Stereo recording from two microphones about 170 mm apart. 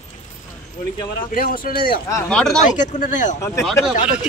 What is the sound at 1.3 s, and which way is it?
Speech, 55° left (ahead or behind).